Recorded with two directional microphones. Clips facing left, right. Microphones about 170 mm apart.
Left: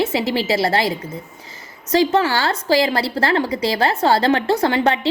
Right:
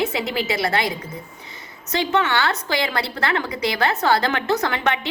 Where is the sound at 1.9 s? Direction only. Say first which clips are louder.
Left 4 dB; 35° left (ahead or behind).